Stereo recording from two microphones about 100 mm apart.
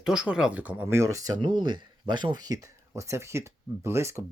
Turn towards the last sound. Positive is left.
turn(degrees=-30)  # may be behind; listen again after turning